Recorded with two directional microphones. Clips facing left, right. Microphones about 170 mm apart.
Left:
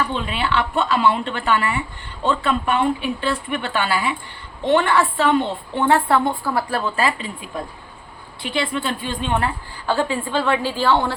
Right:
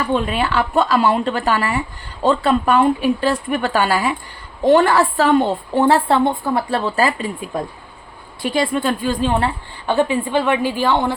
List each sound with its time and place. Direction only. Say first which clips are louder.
0.1 s a woman's voice: right 4 dB; 45° right (ahead or behind); by 6.9 s 25° right (ahead or behind)
6.9 s a woman's voice: right 4 dB; 40° right (ahead or behind)
9.8 s a woman's voice: right 4 dB; 20° right (ahead or behind)